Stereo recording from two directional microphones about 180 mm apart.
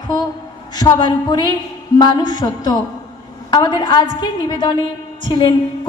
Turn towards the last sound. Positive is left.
turn(degrees=25)  # may be behind; listen again after turning